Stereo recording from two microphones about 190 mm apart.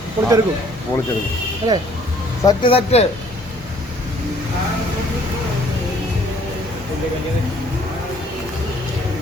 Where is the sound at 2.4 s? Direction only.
20° left (ahead or behind).